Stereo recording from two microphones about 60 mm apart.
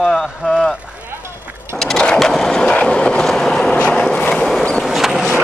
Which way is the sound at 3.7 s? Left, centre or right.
Centre.